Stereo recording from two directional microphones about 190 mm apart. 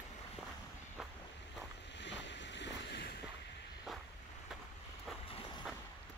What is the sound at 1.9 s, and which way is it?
Boat, 70° left (ahead or behind).